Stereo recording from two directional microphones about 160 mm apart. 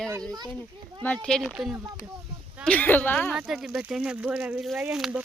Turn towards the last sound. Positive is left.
turn(degrees=-5)  # may be behind; listen again after turning